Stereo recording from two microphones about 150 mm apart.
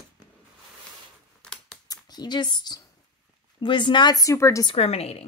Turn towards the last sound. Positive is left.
turn(degrees=40)  # may be behind; listen again after turning